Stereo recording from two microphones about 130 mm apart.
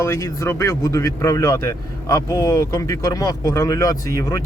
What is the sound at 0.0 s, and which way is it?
Speech, 20° left (ahead or behind).